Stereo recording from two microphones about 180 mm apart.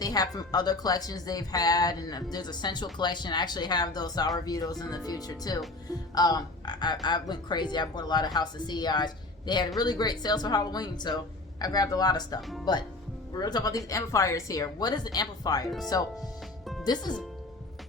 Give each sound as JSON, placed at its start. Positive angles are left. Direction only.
{"t": 0.0, "sound": "speech", "side_deg": 20}